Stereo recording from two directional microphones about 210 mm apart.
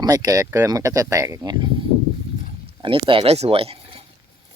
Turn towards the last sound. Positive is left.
turn(degrees=-25)  # may be behind; listen again after turning